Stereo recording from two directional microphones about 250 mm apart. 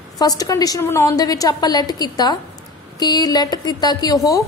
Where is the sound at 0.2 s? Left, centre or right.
Centre.